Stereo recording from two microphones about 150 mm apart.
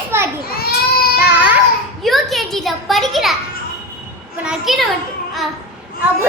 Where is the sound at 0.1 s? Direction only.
15° right (ahead or behind).